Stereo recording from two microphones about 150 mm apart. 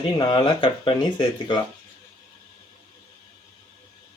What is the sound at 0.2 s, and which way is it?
Speech, 30° left (ahead or behind).